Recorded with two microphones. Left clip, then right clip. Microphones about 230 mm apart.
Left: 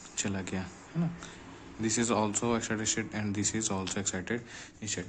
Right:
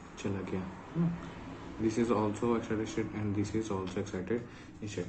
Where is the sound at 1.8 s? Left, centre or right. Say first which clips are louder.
Left 1 dB; left.